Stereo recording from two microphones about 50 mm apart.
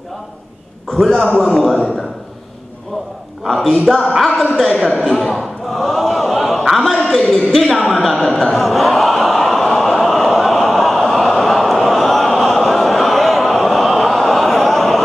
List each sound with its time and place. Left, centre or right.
0.9 s a man's voice: centre
3.4 s a man's voice: centre
5.0 s a sound: centre